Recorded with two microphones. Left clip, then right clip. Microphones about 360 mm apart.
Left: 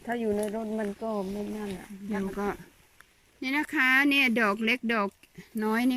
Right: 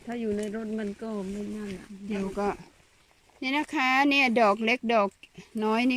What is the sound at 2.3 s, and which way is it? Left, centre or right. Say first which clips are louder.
Speech: right 3 dB; centre.